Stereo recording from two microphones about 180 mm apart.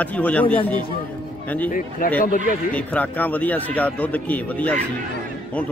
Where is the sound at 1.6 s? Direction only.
50° left (ahead or behind).